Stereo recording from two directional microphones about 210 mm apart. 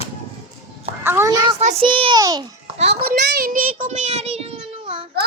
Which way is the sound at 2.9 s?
50° right (ahead or behind).